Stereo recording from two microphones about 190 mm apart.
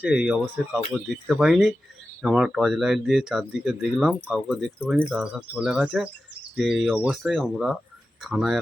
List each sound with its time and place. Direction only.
0.0 s speech: 5° right (ahead or behind)